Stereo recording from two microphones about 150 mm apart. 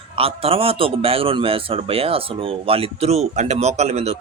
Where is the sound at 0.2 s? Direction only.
40° right (ahead or behind).